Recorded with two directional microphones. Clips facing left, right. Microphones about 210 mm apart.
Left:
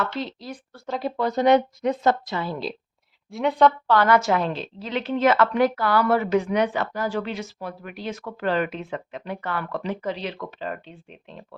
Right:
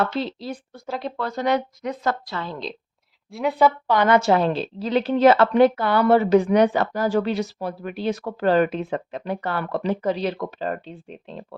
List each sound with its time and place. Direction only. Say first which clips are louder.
0.0 s a woman's voice: right 4 dB; 30° right (ahead or behind)
0.9 s a woman's voice: left 1 dB; centre (ahead or behind)
1.1 s speech: left 5 dB; 20° left (ahead or behind)
2.4 s a woman's voice: left 2 dB; 5° left (ahead or behind)
3.8 s a woman's voice: right 1 dB; 15° right (ahead or behind)
4.2 s speech: right 4 dB; 35° right (ahead or behind)